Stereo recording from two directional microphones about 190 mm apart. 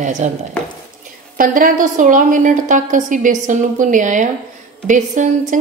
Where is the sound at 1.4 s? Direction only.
45° right (ahead or behind).